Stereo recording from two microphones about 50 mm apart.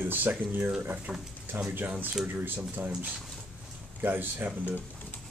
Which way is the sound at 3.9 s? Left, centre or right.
Right.